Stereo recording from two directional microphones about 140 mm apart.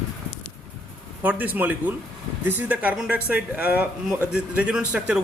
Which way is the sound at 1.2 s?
10° right (ahead or behind).